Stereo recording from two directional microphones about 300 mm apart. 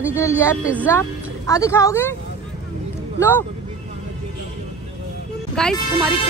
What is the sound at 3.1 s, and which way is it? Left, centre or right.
Speech, centre.